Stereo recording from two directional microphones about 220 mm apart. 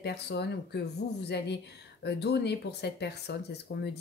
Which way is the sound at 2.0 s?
50° left (ahead or behind).